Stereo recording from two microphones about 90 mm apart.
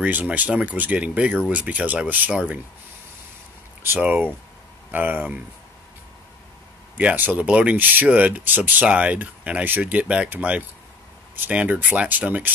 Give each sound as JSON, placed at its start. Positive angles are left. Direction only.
{"t": 0.0, "sound": "speech", "side_deg": -15}
{"t": 3.8, "sound": "speech", "side_deg": -20}
{"t": 7.0, "sound": "speech", "side_deg": -15}